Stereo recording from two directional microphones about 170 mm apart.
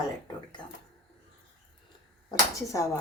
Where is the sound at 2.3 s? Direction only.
20° left (ahead or behind).